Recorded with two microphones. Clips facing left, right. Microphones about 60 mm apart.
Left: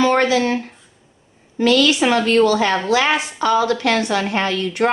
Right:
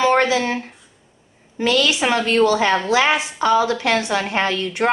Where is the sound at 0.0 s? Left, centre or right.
Centre.